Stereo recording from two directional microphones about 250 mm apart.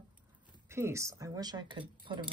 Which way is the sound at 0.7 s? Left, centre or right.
Centre.